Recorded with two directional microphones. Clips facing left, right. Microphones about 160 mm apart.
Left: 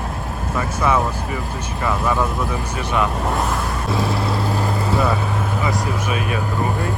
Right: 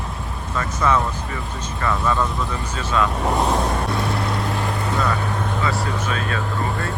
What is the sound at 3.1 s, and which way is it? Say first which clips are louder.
Speech: right 1 dB; centre (ahead or behind).